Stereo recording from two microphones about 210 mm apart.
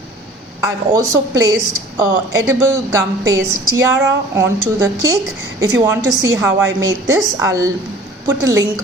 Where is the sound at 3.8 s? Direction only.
10° right (ahead or behind).